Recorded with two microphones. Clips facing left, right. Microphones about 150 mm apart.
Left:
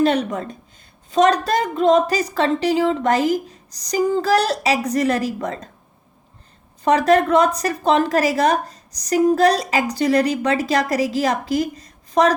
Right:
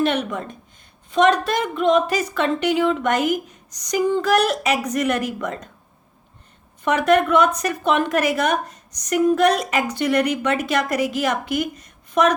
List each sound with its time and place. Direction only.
0.0 s a woman's voice: 40° left (ahead or behind)
6.8 s a woman's voice: 35° left (ahead or behind)